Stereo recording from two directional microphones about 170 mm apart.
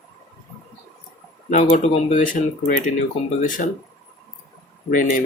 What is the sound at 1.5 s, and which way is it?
Speech, 45° left (ahead or behind).